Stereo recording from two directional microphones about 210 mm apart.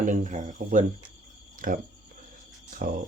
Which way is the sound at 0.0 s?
35° right (ahead or behind).